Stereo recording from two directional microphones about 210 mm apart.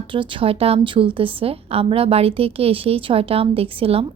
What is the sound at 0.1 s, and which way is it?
A woman's voice, 25° right (ahead or behind).